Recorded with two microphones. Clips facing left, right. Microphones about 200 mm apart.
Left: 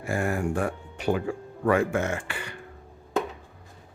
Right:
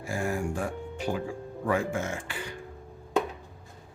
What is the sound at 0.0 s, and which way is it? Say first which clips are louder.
Speech: left 3 dB; 60° left (ahead or behind).